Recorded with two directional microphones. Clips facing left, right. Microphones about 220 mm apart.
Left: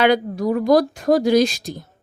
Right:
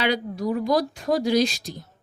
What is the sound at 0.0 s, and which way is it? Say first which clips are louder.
A woman's voice: left 7 dB; 50° left (ahead or behind).